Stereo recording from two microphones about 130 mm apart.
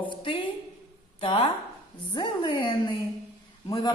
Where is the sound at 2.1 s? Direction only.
35° left (ahead or behind).